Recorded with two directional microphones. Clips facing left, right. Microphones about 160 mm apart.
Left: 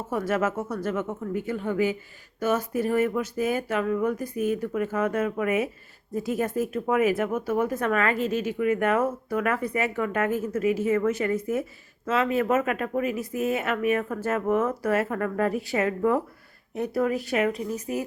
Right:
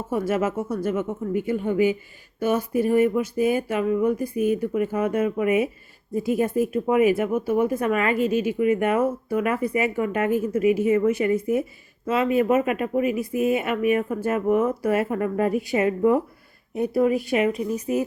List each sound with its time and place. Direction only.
0.1 s speech: 10° right (ahead or behind)